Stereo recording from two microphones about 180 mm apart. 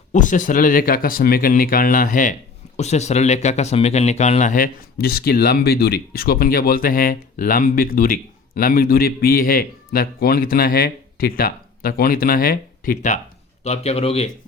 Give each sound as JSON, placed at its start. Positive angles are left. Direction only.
{"t": 0.1, "sound": "speech", "side_deg": 45}
{"t": 13.7, "sound": "speech", "side_deg": 35}